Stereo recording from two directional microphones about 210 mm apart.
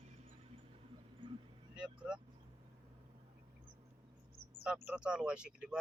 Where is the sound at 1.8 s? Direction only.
5° right (ahead or behind).